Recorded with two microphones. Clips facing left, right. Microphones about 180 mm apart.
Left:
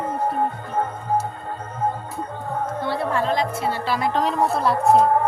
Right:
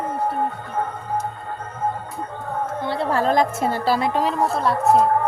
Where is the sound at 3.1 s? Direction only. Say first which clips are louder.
Right 6 dB; 45° right (ahead or behind).